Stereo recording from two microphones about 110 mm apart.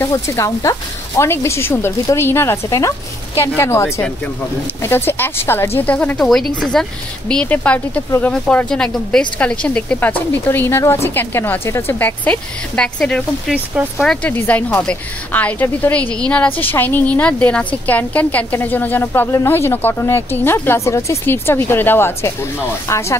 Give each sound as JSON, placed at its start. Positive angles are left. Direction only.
{"t": 0.0, "sound": "a woman's voice", "side_deg": 25}
{"t": 12.3, "sound": "a woman's voice", "side_deg": 10}
{"t": 14.2, "sound": "a woman's voice", "side_deg": 15}